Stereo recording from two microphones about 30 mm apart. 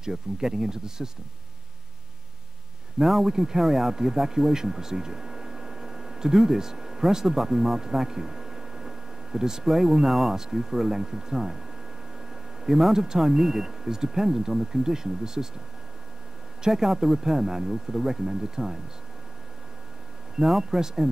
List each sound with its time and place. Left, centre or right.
0.0 s speech: centre
3.0 s speech: centre
7.3 s a sound: centre
9.7 s speech: centre
12.6 s speech: centre
16.6 s speech: centre
20.3 s speech: centre